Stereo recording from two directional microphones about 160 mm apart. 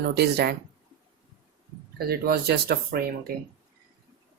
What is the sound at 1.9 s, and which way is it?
Speech, 70° right (ahead or behind).